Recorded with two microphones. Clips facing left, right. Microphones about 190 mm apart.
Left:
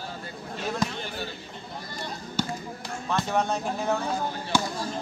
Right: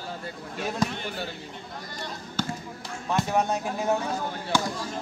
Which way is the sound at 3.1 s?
15° right (ahead or behind).